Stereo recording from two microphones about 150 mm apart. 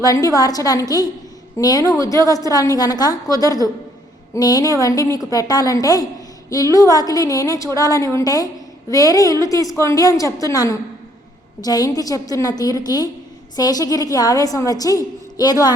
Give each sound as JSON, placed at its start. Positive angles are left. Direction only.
{"t": 0.0, "sound": "a woman's voice", "side_deg": 25}